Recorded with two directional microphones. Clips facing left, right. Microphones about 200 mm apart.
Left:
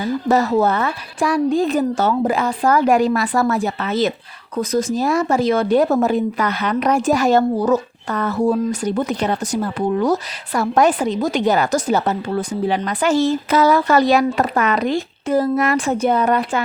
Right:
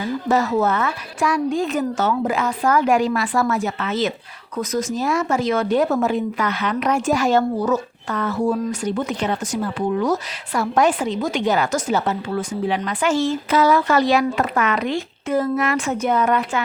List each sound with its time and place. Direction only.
0.0 s speech: 35° left (ahead or behind)